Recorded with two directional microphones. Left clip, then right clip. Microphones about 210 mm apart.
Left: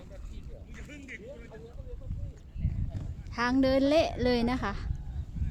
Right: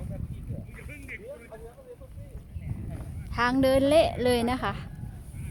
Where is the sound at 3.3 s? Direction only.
10° right (ahead or behind).